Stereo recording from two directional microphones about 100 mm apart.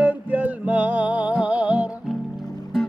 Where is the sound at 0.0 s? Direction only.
15° right (ahead or behind).